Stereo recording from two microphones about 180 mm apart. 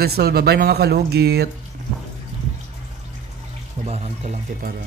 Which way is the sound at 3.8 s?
35° right (ahead or behind).